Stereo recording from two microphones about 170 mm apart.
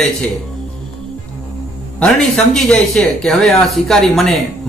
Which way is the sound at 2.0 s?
5° left (ahead or behind).